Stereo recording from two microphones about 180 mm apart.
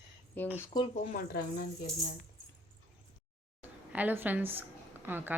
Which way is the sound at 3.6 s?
10° right (ahead or behind).